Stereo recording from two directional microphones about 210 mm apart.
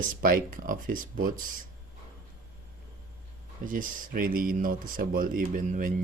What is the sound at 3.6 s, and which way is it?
Speech, 40° right (ahead or behind).